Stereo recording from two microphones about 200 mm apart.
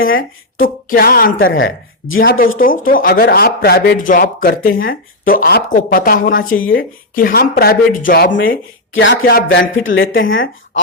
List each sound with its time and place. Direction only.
0.0 s speech: 80° left
0.6 s speech: 45° left (ahead or behind)
1.5 s speech: 80° left
2.2 s speech: 45° left (ahead or behind)
8.3 s speech: 75° left (ahead or behind)
9.2 s speech: 50° left (ahead or behind); by 10.5 s 75° left (ahead or behind)